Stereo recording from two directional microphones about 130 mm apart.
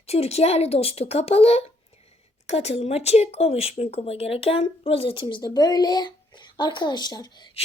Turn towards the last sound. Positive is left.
turn(degrees=35)  # may be behind; listen again after turning